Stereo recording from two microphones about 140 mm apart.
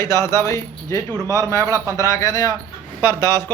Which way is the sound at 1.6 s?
20° right (ahead or behind).